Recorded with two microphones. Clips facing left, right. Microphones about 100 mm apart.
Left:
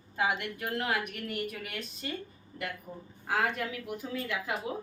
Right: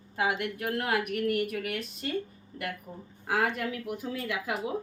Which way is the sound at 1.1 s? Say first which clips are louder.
Right 8 dB; 60° right (ahead or behind).